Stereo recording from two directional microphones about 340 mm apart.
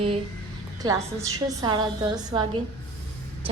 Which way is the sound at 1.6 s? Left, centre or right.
Centre.